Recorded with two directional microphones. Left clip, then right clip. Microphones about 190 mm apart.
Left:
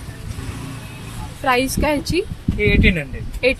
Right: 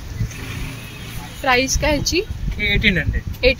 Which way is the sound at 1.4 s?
Centre (ahead or behind).